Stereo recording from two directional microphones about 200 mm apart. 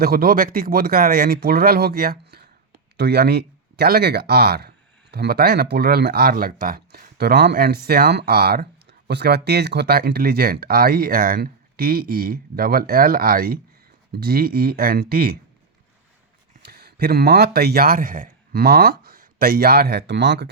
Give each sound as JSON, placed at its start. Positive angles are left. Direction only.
{"t": 0.0, "sound": "speech", "side_deg": -50}
{"t": 16.6, "sound": "a man's voice", "side_deg": -50}